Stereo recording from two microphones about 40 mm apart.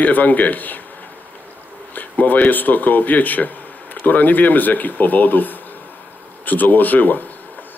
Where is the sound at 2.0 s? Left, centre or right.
Left.